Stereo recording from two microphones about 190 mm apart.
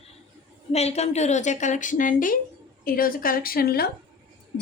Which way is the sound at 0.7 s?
35° left (ahead or behind).